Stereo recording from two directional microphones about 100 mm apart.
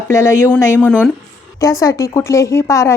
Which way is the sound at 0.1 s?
25° left (ahead or behind).